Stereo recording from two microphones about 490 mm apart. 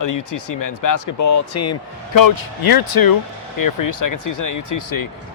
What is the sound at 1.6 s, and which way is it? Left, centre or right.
Speech, left.